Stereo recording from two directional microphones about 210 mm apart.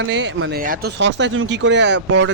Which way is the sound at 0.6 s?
45° right (ahead or behind).